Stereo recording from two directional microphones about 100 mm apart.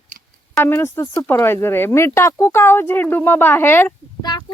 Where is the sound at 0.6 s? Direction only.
25° left (ahead or behind).